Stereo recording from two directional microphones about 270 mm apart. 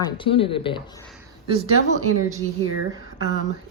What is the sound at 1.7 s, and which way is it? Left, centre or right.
Speech, right.